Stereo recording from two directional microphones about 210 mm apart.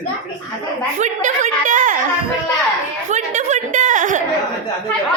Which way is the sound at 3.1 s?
35° right (ahead or behind).